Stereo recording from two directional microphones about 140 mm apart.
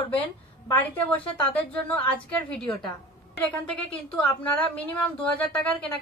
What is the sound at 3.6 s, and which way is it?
A woman's voice, 10° left (ahead or behind).